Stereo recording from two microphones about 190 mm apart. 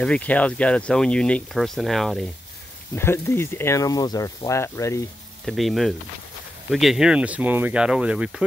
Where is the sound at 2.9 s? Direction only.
10° left (ahead or behind).